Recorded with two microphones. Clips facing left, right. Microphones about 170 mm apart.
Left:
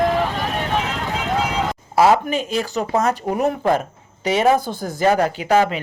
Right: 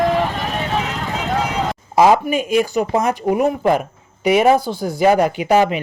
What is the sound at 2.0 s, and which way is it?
Speech, 15° right (ahead or behind).